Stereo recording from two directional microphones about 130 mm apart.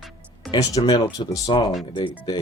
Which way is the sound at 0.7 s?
30° left (ahead or behind).